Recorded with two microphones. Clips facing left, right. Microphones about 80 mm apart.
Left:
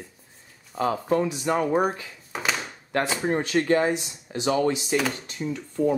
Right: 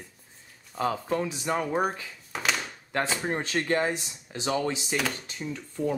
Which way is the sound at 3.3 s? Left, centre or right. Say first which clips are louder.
Left 5 dB; centre.